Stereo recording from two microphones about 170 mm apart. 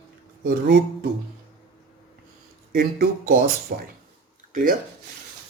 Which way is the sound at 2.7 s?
65° right (ahead or behind).